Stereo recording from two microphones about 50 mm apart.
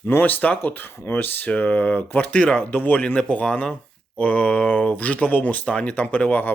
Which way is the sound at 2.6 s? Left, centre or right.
Left.